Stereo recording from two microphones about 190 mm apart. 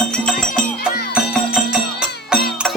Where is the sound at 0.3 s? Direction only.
5° left (ahead or behind).